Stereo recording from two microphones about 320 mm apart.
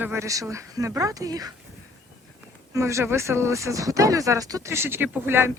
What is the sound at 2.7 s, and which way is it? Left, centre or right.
Speech, centre.